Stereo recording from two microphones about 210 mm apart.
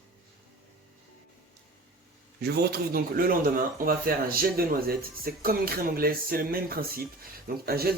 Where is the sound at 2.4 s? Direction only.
50° right (ahead or behind).